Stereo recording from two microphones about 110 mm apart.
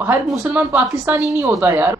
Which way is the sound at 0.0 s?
15° right (ahead or behind).